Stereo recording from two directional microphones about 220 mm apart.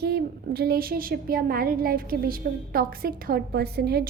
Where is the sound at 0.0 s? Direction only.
45° right (ahead or behind).